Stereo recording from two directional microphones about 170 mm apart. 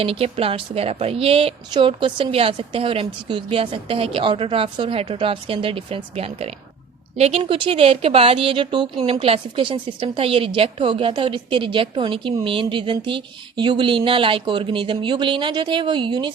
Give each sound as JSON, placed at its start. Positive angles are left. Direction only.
{"t": 0.0, "sound": "a woman's voice", "side_deg": -35}